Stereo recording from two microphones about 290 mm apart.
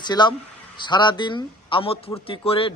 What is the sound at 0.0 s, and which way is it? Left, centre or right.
Speech, centre.